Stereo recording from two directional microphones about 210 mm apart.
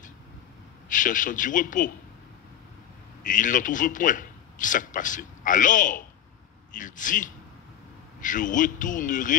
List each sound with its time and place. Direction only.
0.8 s a man's voice: 40° left (ahead or behind)
3.3 s a man's voice: 40° left (ahead or behind)